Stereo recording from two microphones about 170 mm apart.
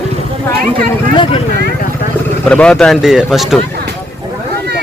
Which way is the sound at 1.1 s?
30° left (ahead or behind).